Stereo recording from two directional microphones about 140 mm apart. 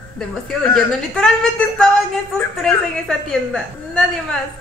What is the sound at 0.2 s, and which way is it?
A woman's voice, 5° left (ahead or behind).